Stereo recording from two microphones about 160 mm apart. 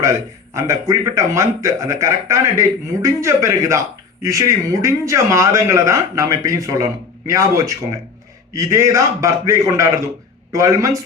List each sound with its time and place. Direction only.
0.0 s a man's voice: 20° right (ahead or behind)